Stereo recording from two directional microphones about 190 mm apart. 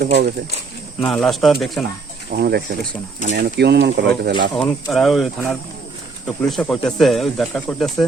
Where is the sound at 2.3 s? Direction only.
55° right (ahead or behind).